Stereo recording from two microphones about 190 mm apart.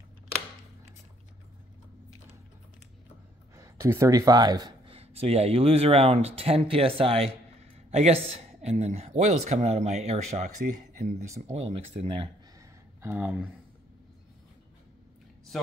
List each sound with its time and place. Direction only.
3.5 s speech: 15° right (ahead or behind)
4.9 s a man's voice: 30° right (ahead or behind)
13.0 s speech: 10° right (ahead or behind)